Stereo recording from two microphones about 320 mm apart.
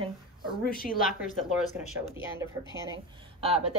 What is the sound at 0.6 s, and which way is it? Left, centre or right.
Speech, left.